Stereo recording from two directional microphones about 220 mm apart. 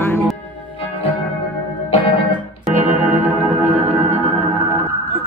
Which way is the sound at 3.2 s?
10° right (ahead or behind).